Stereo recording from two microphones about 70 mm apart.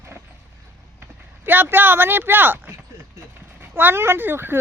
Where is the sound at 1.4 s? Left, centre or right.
Right.